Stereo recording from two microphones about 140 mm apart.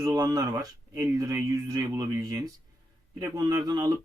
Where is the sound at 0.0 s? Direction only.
25° right (ahead or behind).